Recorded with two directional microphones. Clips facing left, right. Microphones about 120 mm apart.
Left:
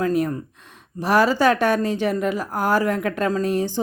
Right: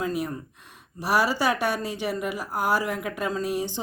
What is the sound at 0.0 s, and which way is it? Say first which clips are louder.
Speech: left 7 dB; 50° left (ahead or behind).